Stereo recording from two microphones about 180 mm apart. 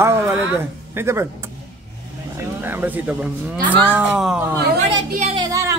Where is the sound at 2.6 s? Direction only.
10° right (ahead or behind).